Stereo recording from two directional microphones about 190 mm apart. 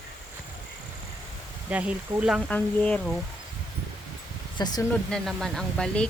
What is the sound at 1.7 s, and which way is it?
Speech, 5° right (ahead or behind).